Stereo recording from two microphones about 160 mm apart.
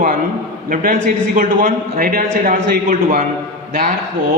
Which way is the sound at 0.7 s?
60° right (ahead or behind).